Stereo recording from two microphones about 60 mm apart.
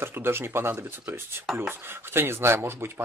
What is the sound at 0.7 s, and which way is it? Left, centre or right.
Speech, right.